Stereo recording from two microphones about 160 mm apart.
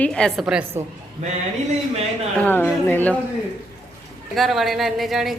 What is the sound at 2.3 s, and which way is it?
Speech, 10° left (ahead or behind).